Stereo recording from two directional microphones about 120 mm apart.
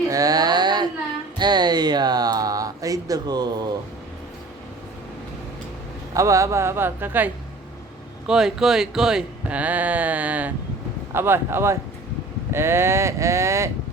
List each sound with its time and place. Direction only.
0.1 s a sound: 30° right (ahead or behind)
1.4 s speech: 35° right (ahead or behind)
6.1 s speech: 25° right (ahead or behind)
8.3 s speech: 5° right (ahead or behind); by 13.7 s 25° right (ahead or behind)